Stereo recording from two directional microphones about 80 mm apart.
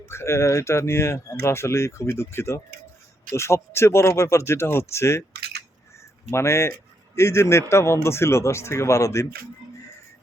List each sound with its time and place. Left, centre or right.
0.1 s speech: left
6.3 s speech: left